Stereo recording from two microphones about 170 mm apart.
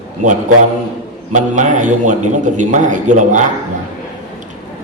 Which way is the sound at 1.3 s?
45° right (ahead or behind).